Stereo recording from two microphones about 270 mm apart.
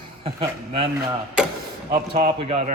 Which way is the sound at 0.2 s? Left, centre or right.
Centre.